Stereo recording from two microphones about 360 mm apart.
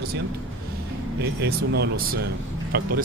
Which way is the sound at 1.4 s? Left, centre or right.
Right.